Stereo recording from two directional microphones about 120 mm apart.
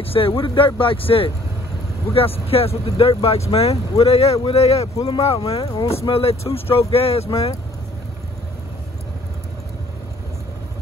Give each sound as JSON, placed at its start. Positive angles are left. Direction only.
{"t": 0.0, "sound": "speech", "side_deg": 50}